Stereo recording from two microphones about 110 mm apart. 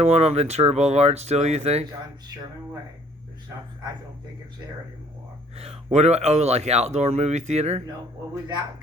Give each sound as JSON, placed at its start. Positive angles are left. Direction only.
{"t": 0.0, "sound": "speech", "side_deg": -75}
{"t": 5.5, "sound": "speech", "side_deg": -70}